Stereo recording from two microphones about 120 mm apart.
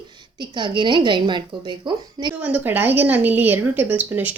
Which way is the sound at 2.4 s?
10° right (ahead or behind).